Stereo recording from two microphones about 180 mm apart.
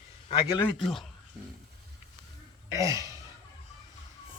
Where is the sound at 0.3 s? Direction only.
20° left (ahead or behind).